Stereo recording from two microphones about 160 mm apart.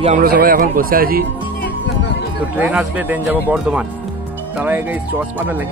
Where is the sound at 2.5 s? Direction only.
10° right (ahead or behind).